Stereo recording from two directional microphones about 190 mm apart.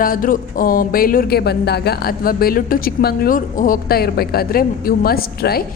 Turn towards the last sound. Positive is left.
turn(degrees=55)  # may be behind; listen again after turning